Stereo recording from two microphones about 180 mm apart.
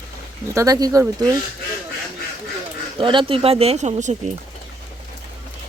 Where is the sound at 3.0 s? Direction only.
30° right (ahead or behind).